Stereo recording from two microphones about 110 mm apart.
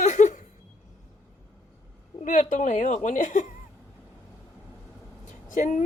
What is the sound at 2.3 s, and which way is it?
A woman's voice, 90° left.